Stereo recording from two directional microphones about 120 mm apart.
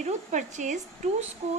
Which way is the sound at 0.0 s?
90° right.